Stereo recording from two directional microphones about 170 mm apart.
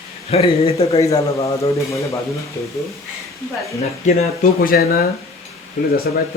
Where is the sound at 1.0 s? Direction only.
20° left (ahead or behind).